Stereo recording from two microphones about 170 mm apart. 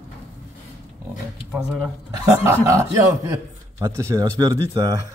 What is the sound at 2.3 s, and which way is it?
A man's voice, 15° right (ahead or behind).